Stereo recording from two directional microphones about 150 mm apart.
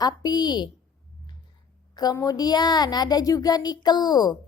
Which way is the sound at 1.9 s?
25° left (ahead or behind).